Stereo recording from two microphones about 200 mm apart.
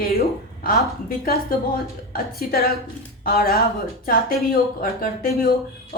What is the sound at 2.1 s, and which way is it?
Speech, 50° left (ahead or behind).